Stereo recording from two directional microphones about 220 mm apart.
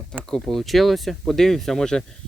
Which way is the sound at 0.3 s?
Centre (ahead or behind).